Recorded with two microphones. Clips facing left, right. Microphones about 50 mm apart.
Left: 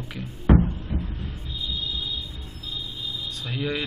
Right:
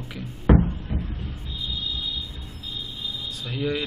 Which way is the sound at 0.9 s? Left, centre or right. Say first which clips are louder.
Even; centre.